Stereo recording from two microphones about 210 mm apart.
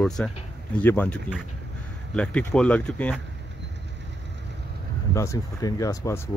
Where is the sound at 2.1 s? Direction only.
5° left (ahead or behind).